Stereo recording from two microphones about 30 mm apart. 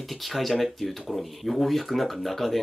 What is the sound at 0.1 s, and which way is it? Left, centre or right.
Speech, centre.